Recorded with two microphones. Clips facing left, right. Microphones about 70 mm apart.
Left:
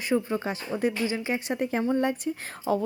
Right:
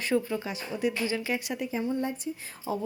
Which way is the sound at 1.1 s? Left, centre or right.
Left.